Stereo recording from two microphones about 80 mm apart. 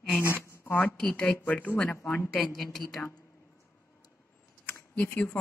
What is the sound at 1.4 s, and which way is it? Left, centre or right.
Speech, left.